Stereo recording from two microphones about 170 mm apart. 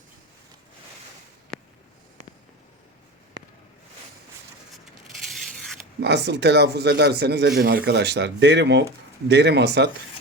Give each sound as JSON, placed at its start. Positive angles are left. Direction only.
{"t": 1.5, "sound": "a sound", "side_deg": 5}
{"t": 6.0, "sound": "speech", "side_deg": -80}
{"t": 7.6, "sound": "speech", "side_deg": -60}